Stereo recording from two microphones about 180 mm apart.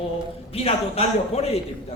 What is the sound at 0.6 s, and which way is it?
Speech, 35° left (ahead or behind).